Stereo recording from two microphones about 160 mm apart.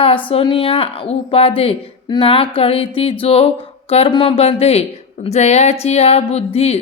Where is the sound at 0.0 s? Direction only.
35° left (ahead or behind).